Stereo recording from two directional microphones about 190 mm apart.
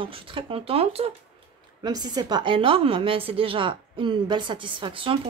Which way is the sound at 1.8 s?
20° right (ahead or behind).